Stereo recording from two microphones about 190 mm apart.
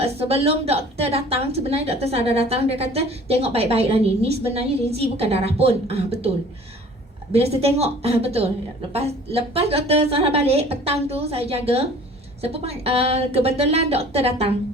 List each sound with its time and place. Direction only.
0.0 s a woman's voice: 30° right (ahead or behind)
7.3 s a woman's voice: 30° right (ahead or behind)